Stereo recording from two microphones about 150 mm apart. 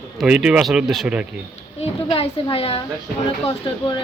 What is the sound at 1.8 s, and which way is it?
A woman's voice, 40° left (ahead or behind).